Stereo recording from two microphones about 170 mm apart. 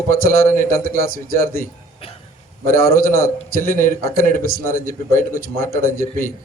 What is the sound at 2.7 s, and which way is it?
A man's voice, 60° left (ahead or behind).